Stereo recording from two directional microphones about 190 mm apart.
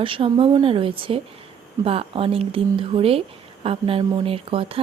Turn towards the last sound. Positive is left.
turn(degrees=-30)  # may be behind; listen again after turning